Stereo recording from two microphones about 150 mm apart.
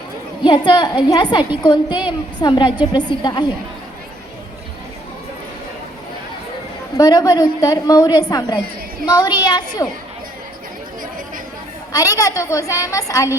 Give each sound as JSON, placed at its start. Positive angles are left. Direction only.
{"t": 0.4, "sound": "a woman's voice", "side_deg": 30}
{"t": 6.9, "sound": "a woman's voice", "side_deg": 25}
{"t": 11.9, "sound": "a woman's voice", "side_deg": 25}